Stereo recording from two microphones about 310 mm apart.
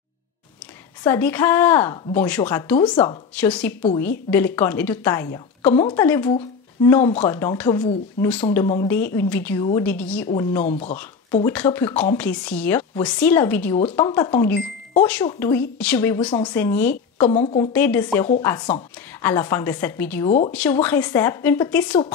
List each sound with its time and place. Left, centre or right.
1.0 s a woman's voice: centre
10.6 s speech: left
11.4 s a woman's voice: centre
16.9 s speech: left
17.7 s a woman's voice: centre
20.2 s speech: left
20.5 s a woman's voice: centre